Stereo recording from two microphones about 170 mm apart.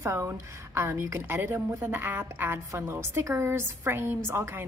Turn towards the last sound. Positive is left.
turn(degrees=-15)  # may be behind; listen again after turning